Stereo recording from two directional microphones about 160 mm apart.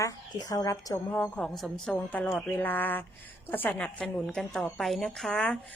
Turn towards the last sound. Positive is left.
turn(degrees=5)  # may be behind; listen again after turning